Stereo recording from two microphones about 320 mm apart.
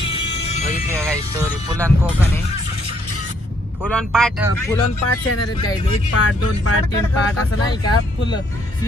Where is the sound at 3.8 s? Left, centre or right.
Centre.